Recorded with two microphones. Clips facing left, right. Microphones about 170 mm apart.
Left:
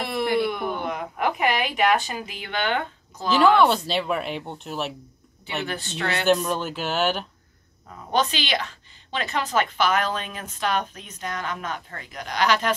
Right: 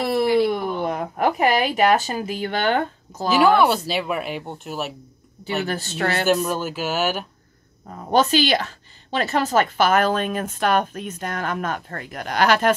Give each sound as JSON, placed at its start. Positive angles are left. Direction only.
{"t": 0.7, "sound": "a sound", "side_deg": -40}
{"t": 2.0, "sound": "a woman's voice", "side_deg": -40}
{"t": 3.3, "sound": "speech", "side_deg": -10}
{"t": 5.4, "sound": "speech", "side_deg": -40}
{"t": 6.2, "sound": "speech", "side_deg": -5}
{"t": 7.9, "sound": "a woman's voice", "side_deg": -40}